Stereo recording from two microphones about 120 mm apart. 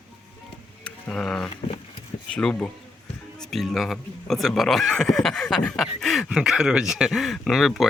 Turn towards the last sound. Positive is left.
turn(degrees=0)  # may be behind; listen again after turning